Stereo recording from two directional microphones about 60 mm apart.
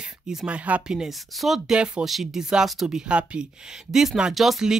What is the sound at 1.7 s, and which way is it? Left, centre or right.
Speech, centre.